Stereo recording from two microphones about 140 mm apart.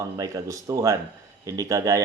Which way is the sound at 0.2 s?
25° right (ahead or behind).